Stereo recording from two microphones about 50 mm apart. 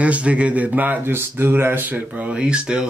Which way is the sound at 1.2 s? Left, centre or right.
Right.